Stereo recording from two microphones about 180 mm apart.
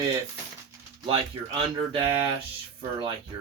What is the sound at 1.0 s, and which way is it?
Speech, 30° right (ahead or behind).